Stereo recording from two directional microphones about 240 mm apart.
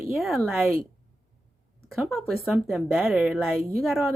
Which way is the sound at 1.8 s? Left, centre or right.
Centre.